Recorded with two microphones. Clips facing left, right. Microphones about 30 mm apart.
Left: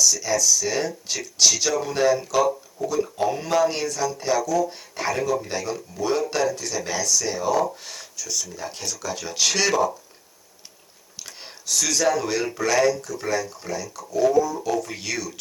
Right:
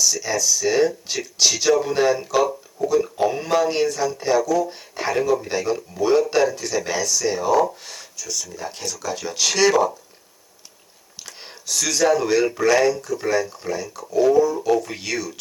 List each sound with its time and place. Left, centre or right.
0.0 s speech: centre
11.3 s speech: centre
13.8 s speech: right
14.2 s speech: centre